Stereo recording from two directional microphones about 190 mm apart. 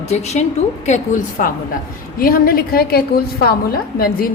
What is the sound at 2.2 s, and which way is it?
A woman's voice, 50° left (ahead or behind).